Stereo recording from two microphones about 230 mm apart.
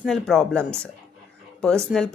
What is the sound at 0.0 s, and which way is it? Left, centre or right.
Speech, centre.